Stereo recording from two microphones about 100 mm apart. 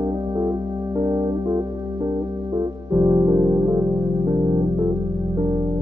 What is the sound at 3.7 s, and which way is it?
Music, 45° right (ahead or behind).